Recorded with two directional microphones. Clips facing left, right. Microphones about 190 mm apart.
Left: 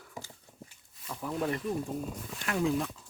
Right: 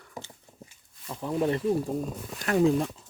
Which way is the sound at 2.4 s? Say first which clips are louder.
Right 7 dB; 40° right (ahead or behind).